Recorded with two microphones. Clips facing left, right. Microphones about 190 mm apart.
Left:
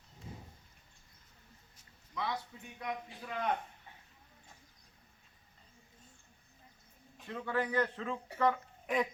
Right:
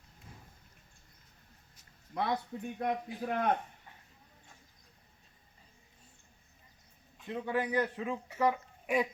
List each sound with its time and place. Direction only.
2.1 s speech: 50° right (ahead or behind)
7.3 s a man's voice: 15° right (ahead or behind)